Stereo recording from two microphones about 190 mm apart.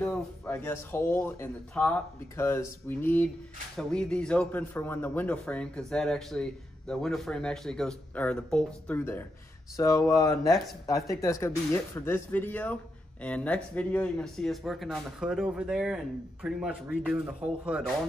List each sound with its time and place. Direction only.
0.5 s a man's voice: 10° left (ahead or behind); by 17.8 s 5° right (ahead or behind)